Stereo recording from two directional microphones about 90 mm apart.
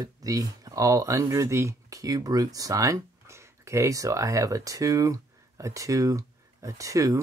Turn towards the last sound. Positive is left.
turn(degrees=-40)  # may be behind; listen again after turning